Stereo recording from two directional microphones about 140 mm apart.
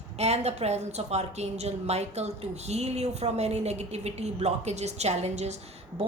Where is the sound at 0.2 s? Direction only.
50° right (ahead or behind).